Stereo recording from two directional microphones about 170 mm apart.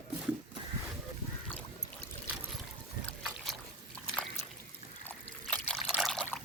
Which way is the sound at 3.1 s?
Centre (ahead or behind).